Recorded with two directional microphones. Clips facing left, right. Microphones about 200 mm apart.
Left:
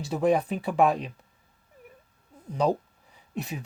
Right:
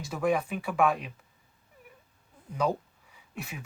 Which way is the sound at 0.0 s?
35° left (ahead or behind).